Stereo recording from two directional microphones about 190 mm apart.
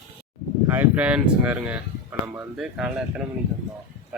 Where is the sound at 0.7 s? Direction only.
10° right (ahead or behind).